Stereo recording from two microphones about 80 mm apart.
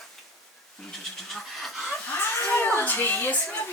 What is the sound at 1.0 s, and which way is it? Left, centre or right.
Pant, centre.